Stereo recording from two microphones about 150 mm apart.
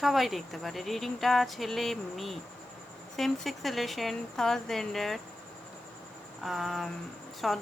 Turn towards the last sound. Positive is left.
turn(degrees=0)  # may be behind; listen again after turning